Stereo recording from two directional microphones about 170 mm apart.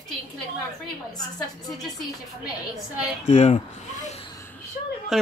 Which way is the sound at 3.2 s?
40° left (ahead or behind).